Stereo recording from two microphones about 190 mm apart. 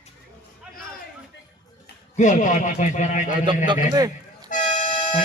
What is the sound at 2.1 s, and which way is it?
A man's voice, 40° left (ahead or behind).